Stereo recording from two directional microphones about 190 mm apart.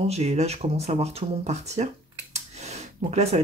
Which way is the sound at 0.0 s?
35° right (ahead or behind).